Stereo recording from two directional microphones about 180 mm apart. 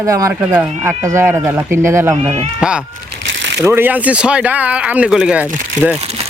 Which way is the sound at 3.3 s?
90° right.